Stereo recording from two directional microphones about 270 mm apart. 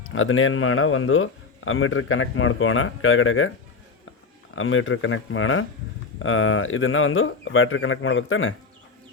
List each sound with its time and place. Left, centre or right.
0.1 s a man's voice: left
4.5 s a man's voice: left